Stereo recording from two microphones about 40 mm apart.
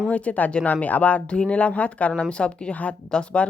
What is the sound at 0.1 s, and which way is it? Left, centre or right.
Speech, left.